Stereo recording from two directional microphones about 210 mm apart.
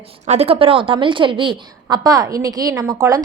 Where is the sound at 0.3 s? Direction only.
30° right (ahead or behind).